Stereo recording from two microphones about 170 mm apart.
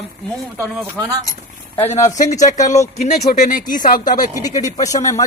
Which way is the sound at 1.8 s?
40° left (ahead or behind).